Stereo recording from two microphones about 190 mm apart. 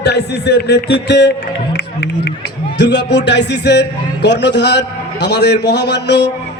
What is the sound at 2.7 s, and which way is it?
A man's voice, 65° left (ahead or behind).